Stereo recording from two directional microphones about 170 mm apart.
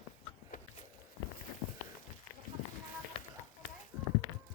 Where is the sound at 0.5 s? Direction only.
55° left (ahead or behind).